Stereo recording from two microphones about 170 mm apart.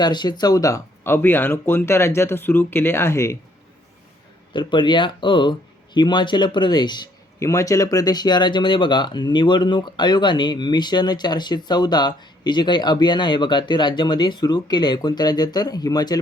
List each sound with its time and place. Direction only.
0.0 s speech: 25° left (ahead or behind)
4.5 s speech: 30° left (ahead or behind)